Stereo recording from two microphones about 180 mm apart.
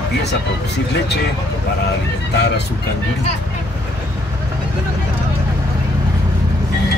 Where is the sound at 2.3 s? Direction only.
65° left (ahead or behind).